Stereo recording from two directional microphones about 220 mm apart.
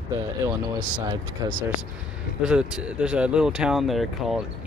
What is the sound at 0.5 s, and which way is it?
Speech, 20° right (ahead or behind).